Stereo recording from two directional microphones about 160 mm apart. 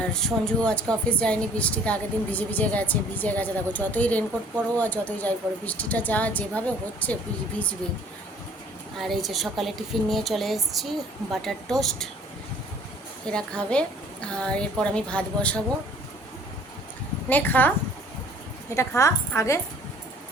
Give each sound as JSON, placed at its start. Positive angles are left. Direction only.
{"t": 0.0, "sound": "a woman's voice", "side_deg": 5}
{"t": 9.0, "sound": "a woman's voice", "side_deg": 0}
{"t": 13.2, "sound": "a woman's voice", "side_deg": 5}
{"t": 17.2, "sound": "a woman's voice", "side_deg": 10}
{"t": 18.7, "sound": "a woman's voice", "side_deg": 20}